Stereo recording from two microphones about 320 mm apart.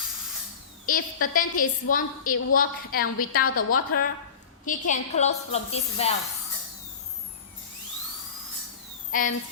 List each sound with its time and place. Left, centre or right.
0.9 s a woman's voice: left
9.1 s a child's voice: left